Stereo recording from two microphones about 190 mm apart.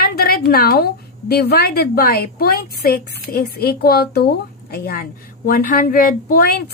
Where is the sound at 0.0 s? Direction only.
50° left (ahead or behind).